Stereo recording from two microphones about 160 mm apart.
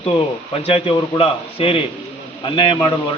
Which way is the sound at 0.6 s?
35° left (ahead or behind).